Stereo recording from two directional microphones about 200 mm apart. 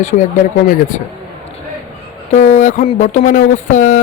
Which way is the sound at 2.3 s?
35° left (ahead or behind).